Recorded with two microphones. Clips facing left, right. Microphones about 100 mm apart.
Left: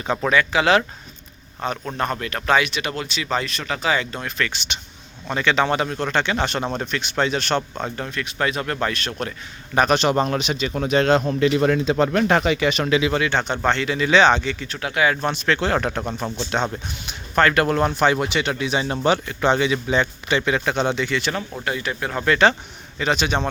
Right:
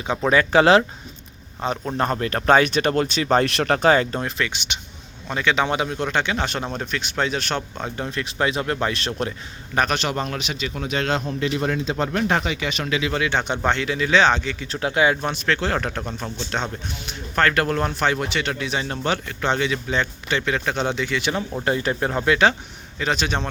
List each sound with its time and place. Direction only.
0.0 s speech: 15° right (ahead or behind)
0.3 s speech: 35° right (ahead or behind)
3.4 s speech: 65° right (ahead or behind); by 4.4 s 25° right (ahead or behind)
4.4 s speech: 15° right (ahead or behind)
8.1 s speech: 25° right (ahead or behind)
9.9 s speech: 30° left (ahead or behind)
11.3 s speech: 80° left; by 12.9 s 50° left (ahead or behind)
13.1 s speech: 5° right (ahead or behind)
14.7 s speech: 25° right (ahead or behind)
15.1 s speech: 5° right (ahead or behind)
20.7 s speech: centre (ahead or behind)
21.6 s speech: 35° right (ahead or behind)
22.1 s speech: 10° right (ahead or behind)